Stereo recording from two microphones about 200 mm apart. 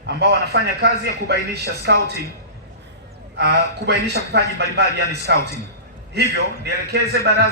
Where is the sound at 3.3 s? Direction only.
55° right (ahead or behind).